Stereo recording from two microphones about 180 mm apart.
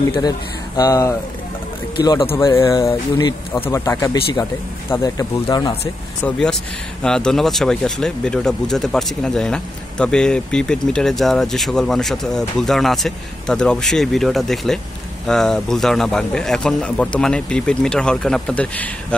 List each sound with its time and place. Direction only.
0.7 s speech: 20° left (ahead or behind)
2.3 s speech: 15° left (ahead or behind)
3.7 s speech: 15° left (ahead or behind)
6.2 s speech: 5° left (ahead or behind)